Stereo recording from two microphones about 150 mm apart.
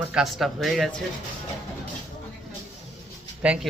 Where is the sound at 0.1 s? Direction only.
5° right (ahead or behind).